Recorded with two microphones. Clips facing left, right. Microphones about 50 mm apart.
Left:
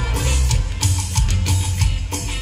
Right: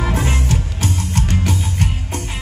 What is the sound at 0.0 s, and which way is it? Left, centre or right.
Music, right.